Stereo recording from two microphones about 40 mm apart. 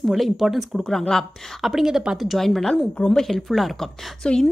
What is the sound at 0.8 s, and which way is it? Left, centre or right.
Speech, centre.